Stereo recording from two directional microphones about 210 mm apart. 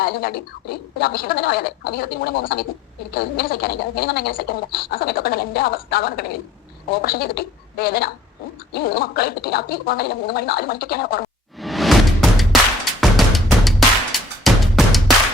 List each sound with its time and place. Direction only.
0.0 s speech: 45° left (ahead or behind)
11.5 s music: centre (ahead or behind)